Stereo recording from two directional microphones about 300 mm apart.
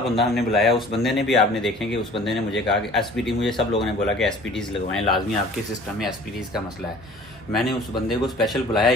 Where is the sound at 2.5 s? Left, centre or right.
Left.